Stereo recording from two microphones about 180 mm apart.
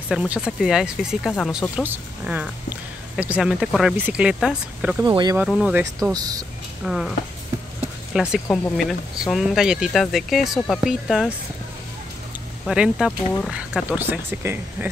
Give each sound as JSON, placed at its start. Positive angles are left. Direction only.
{"t": 0.1, "sound": "speech", "side_deg": -5}
{"t": 5.0, "sound": "speech", "side_deg": -20}
{"t": 5.5, "sound": "speech", "side_deg": -5}
{"t": 6.8, "sound": "speech", "side_deg": -5}
{"t": 12.6, "sound": "speech", "side_deg": -5}